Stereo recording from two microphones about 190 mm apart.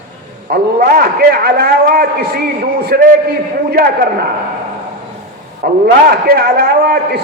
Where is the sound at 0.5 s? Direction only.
55° right (ahead or behind).